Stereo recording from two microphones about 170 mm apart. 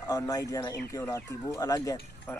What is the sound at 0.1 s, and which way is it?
Speech, 20° left (ahead or behind).